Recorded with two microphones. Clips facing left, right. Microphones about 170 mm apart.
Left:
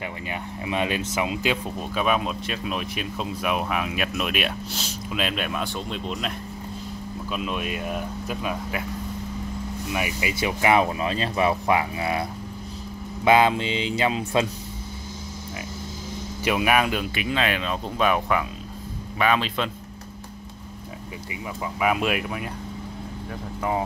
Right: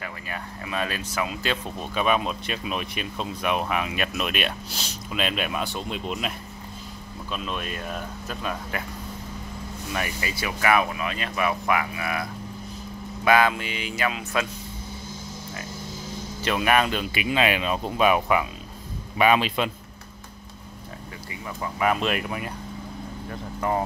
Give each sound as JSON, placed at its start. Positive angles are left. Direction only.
{"t": 0.3, "sound": "speech", "side_deg": 20}
{"t": 1.8, "sound": "speech", "side_deg": 0}
{"t": 7.2, "sound": "speech", "side_deg": 10}
{"t": 9.9, "sound": "speech", "side_deg": 10}
{"t": 10.3, "sound": "speech", "side_deg": 20}
{"t": 16.4, "sound": "speech", "side_deg": 10}
{"t": 21.7, "sound": "speech", "side_deg": 5}